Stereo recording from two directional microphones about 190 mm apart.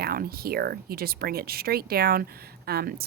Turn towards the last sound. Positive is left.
turn(degrees=-55)  # may be behind; listen again after turning